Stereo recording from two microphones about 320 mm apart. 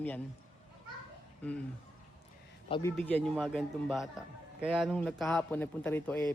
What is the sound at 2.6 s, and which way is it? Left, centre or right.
Speech, centre.